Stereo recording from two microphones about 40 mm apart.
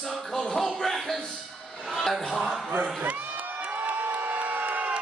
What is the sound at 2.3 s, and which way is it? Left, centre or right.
Speech, centre.